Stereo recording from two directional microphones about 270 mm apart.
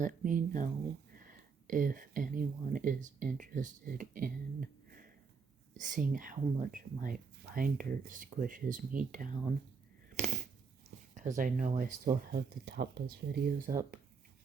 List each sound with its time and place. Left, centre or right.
0.0 s speech: right
11.1 s speech: right